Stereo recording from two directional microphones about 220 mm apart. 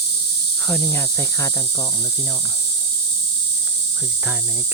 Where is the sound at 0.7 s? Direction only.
10° left (ahead or behind).